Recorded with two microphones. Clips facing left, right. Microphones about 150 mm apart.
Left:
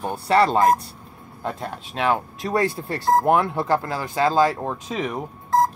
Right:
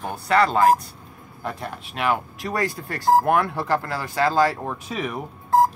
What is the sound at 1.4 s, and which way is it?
Speech, 20° left (ahead or behind).